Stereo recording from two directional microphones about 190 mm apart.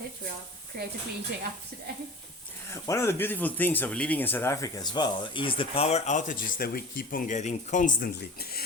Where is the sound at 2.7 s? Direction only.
15° left (ahead or behind).